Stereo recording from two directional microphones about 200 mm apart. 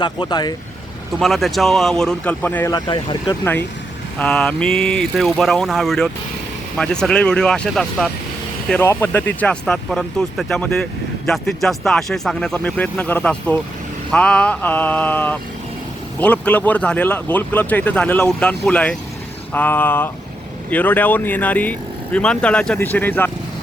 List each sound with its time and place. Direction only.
0.0 s speech: 20° left (ahead or behind)
1.2 s speech: centre (ahead or behind)
2.7 s speech: 25° left (ahead or behind)
4.2 s speech: 5° left (ahead or behind)